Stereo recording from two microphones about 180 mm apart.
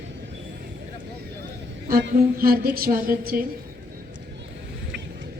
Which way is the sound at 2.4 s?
55° right (ahead or behind).